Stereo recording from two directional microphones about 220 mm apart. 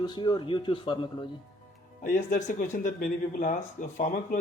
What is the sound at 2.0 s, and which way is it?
Speech, 35° left (ahead or behind).